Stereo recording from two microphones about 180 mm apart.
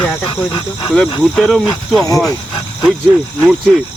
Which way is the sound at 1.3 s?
Centre (ahead or behind).